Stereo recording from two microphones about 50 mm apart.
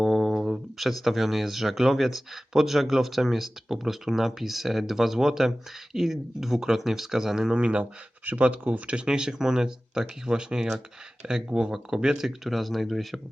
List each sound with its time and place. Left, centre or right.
0.0 s a sound: centre
0.5 s speech: centre
7.6 s speech: right
12.5 s speech: centre